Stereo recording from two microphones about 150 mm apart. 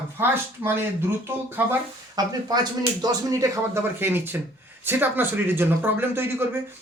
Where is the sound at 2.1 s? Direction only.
25° right (ahead or behind).